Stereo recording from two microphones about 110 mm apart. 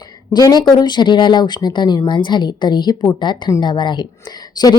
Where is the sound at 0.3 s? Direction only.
35° left (ahead or behind).